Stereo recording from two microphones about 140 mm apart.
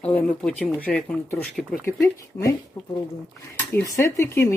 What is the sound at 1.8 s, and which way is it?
Speech, 20° left (ahead or behind).